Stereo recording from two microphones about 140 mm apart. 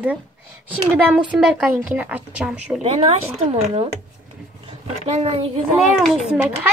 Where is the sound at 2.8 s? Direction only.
45° right (ahead or behind).